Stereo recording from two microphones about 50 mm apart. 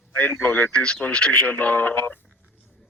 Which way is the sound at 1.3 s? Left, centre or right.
Left.